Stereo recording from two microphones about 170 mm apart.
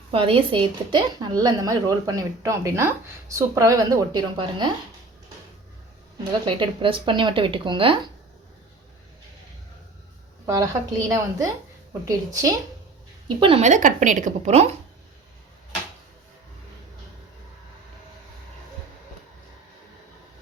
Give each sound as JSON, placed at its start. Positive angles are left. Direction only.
{"t": 0.1, "sound": "a woman's voice", "side_deg": -30}
{"t": 6.4, "sound": "a woman's voice", "side_deg": -30}
{"t": 10.4, "sound": "a woman's voice", "side_deg": -20}
{"t": 13.2, "sound": "a woman's voice", "side_deg": -30}
{"t": 13.6, "sound": "a woman's voice", "side_deg": -45}